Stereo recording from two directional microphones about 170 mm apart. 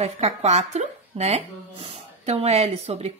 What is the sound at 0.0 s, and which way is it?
Speech, 40° right (ahead or behind).